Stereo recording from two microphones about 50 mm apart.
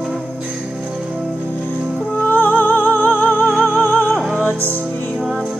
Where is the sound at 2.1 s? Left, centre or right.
Left.